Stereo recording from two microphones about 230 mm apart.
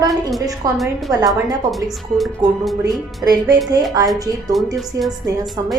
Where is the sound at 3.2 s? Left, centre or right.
Centre.